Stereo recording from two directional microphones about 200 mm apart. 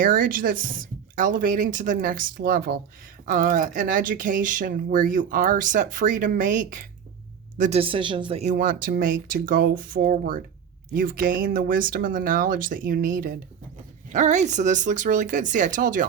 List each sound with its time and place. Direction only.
0.0 s speech: 45° right (ahead or behind)
7.6 s speech: 30° right (ahead or behind)